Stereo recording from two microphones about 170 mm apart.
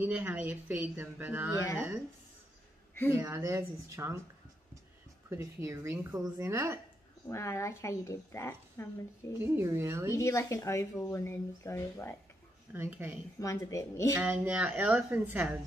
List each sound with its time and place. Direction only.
0.0 s speech: 10° right (ahead or behind)
3.1 s speech: 15° right (ahead or behind)
5.3 s speech: 20° right (ahead or behind)
7.2 s a woman's voice: 15° left (ahead or behind)
9.4 s speech: 15° right (ahead or behind)
10.1 s a woman's voice: 15° left (ahead or behind)
12.7 s speech: 15° right (ahead or behind)
13.4 s a woman's voice: 20° left (ahead or behind)
14.1 s speech: 10° right (ahead or behind)